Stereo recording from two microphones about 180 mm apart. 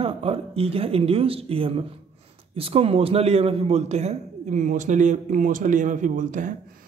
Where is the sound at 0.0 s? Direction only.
30° right (ahead or behind).